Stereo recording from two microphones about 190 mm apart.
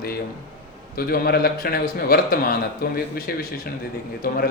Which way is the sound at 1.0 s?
55° left (ahead or behind).